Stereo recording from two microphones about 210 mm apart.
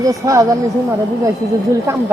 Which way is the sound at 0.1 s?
15° right (ahead or behind).